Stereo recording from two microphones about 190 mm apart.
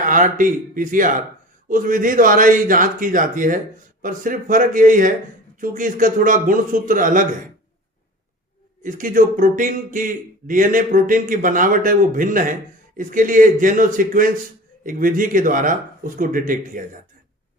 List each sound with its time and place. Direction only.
0.0 s speech: 45° right (ahead or behind)
8.8 s speech: 45° right (ahead or behind)